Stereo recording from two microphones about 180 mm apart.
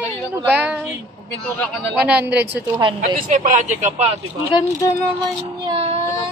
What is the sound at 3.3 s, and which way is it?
Speech, 45° right (ahead or behind).